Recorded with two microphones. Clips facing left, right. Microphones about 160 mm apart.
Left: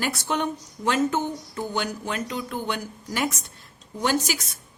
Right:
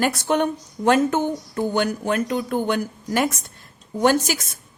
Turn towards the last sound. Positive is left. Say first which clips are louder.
# right 6 dB
turn(degrees=-50)  # may be behind; listen again after turning